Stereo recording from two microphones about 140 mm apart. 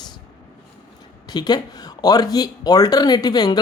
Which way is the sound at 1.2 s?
30° left (ahead or behind).